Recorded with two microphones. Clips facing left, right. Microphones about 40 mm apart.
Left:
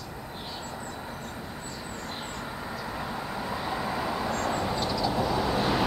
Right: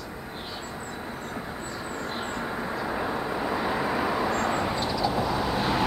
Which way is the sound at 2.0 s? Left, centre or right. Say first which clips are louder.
Right 6 dB; centre.